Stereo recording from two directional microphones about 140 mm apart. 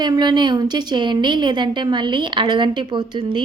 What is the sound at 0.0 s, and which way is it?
A woman's voice, 30° right (ahead or behind).